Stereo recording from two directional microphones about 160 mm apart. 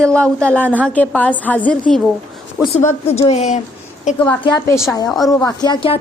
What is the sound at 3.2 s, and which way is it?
Speech, 45° left (ahead or behind).